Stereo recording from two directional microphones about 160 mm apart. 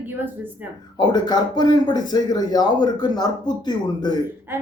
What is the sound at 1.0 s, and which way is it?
Speech, 25° left (ahead or behind).